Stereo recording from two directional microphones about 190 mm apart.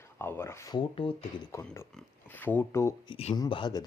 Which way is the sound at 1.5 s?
15° left (ahead or behind).